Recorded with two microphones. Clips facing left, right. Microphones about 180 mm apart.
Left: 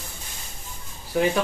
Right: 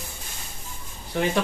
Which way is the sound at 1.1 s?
5° left (ahead or behind).